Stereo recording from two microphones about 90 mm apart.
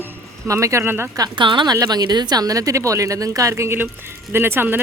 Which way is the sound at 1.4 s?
60° right (ahead or behind).